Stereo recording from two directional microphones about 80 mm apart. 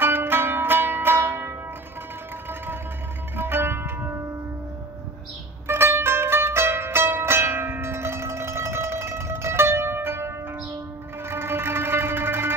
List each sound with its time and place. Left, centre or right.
0.0 s music: right
3.3 s music: right
5.7 s zither: right
11.2 s music: right